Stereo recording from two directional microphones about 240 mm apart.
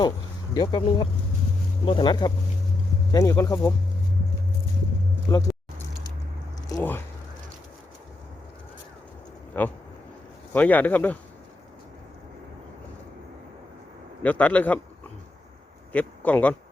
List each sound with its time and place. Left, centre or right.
0.5 s speech: centre
5.3 s speech: centre
6.7 s speech: centre
9.5 s speech: centre
14.2 s a man's voice: centre
15.9 s speech: centre